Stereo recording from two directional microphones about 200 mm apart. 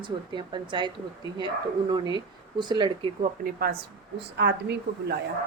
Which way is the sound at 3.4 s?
50° right (ahead or behind).